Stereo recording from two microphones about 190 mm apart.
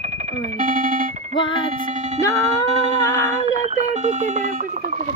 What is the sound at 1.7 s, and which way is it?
Music, 40° right (ahead or behind).